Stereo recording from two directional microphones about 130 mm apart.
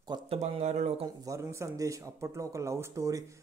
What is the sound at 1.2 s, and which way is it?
Speech, 20° right (ahead or behind).